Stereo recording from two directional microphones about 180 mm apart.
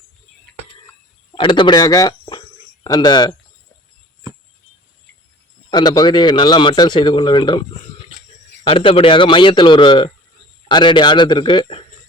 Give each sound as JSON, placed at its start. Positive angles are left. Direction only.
{"t": 1.4, "sound": "a man's voice", "side_deg": 25}
{"t": 5.7, "sound": "a man's voice", "side_deg": 20}